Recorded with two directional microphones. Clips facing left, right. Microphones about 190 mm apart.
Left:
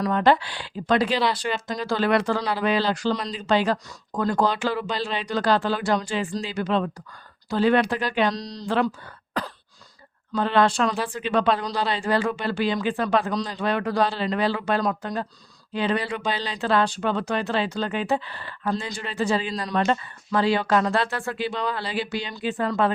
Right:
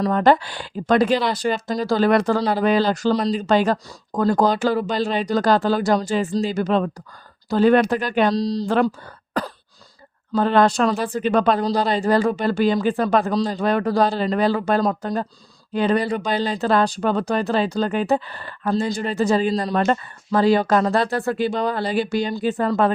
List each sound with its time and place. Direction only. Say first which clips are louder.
0.1 s speech: right 2 dB; 45° right (ahead or behind)
8.3 s speech: right 9 dB; 30° right (ahead or behind)
8.7 s speech: even; 45° right (ahead or behind)